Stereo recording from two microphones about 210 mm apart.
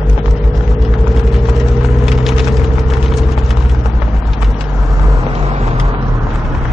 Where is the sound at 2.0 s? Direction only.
Centre (ahead or behind).